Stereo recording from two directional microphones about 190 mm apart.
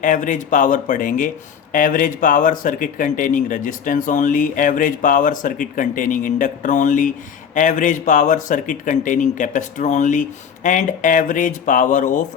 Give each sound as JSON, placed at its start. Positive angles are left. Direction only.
{"t": 0.0, "sound": "speech", "side_deg": 40}